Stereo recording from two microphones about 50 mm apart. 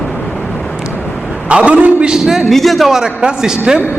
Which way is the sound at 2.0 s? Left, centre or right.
Centre.